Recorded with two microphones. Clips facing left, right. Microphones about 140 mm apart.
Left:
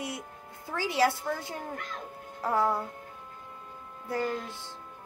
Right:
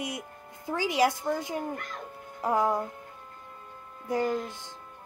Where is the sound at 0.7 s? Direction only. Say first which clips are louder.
Right 1 dB; 15° right (ahead or behind).